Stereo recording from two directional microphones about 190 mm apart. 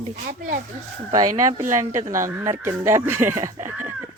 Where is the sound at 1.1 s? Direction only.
20° right (ahead or behind).